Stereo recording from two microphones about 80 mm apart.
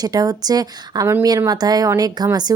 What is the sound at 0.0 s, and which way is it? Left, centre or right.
Speech, right.